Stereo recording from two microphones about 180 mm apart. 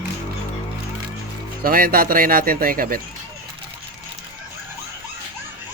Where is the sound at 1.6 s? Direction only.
55° right (ahead or behind).